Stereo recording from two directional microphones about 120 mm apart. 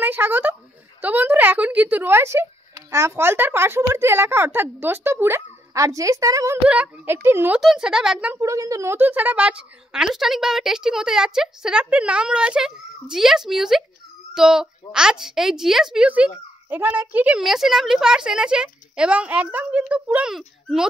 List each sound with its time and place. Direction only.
0.0 s a woman's voice: 15° right (ahead or behind)
6.7 s speech: 10° right (ahead or behind)
7.6 s a woman's voice: 5° right (ahead or behind)
8.4 s a woman's voice: 25° right (ahead or behind)
17.4 s speech: centre (ahead or behind)